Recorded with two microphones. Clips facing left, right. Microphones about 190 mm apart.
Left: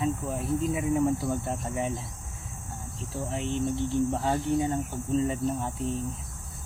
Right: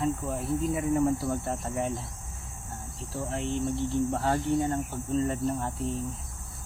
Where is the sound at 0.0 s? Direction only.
Centre (ahead or behind).